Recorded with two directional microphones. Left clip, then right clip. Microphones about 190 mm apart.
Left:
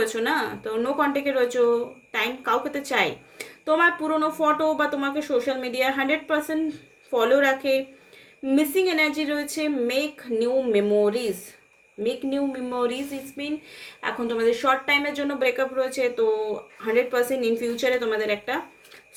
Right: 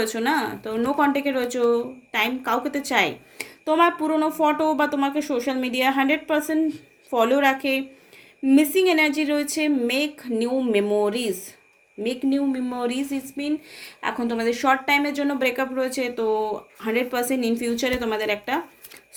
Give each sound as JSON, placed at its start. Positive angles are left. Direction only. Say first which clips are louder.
{"t": 0.0, "sound": "speech", "louder": "right 1 dB", "side_deg": -35}